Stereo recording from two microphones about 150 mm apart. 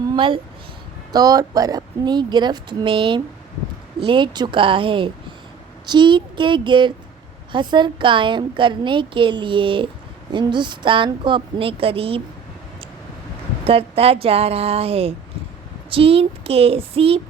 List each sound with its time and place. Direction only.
1.1 s a woman's voice: 25° right (ahead or behind)
13.7 s a woman's voice: 40° right (ahead or behind)